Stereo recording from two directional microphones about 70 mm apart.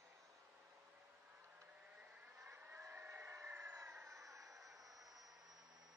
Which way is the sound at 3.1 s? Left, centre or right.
Right.